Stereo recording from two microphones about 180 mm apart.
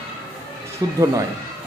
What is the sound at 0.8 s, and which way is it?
Speech, 20° right (ahead or behind).